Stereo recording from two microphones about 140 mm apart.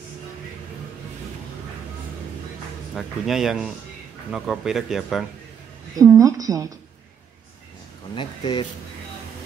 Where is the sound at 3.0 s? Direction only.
Centre (ahead or behind).